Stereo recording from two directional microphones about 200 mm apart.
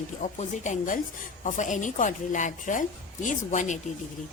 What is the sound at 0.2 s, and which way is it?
A woman's voice, 35° left (ahead or behind).